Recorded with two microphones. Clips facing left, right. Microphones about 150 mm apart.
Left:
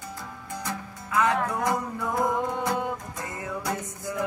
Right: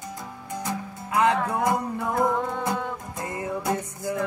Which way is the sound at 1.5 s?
25° right (ahead or behind).